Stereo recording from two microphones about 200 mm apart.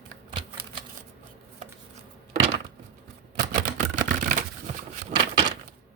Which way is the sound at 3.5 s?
40° right (ahead or behind).